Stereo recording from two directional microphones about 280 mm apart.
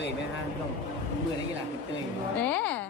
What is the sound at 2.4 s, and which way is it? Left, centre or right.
Speech, centre.